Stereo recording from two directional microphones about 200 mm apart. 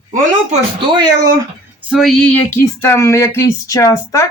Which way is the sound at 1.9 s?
Centre (ahead or behind).